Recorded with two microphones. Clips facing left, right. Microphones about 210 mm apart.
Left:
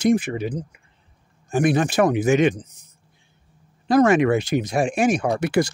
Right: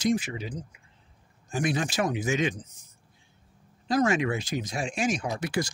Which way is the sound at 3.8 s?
65° left (ahead or behind).